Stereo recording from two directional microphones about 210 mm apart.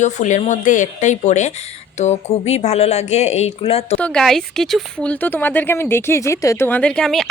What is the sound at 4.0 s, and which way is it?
Speech, 5° left (ahead or behind).